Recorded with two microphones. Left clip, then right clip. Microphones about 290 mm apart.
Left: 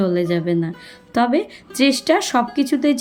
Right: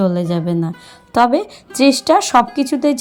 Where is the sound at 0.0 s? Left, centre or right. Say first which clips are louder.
Right 1 dB; centre.